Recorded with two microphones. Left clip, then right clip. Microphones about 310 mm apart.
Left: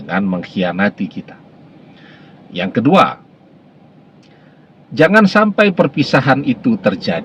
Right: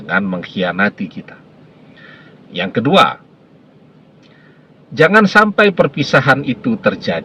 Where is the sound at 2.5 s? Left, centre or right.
Right.